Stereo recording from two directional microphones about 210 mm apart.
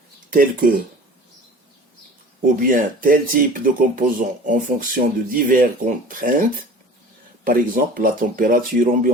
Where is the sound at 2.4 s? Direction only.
40° right (ahead or behind).